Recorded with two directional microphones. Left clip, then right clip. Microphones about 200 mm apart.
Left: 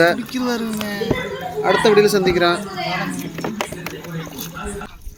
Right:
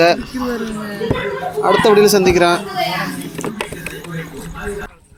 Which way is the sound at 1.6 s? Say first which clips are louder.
Right 3 dB; 15° right (ahead or behind).